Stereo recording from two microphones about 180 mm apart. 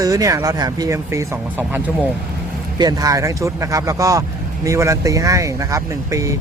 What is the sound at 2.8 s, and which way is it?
Speech, 20° right (ahead or behind).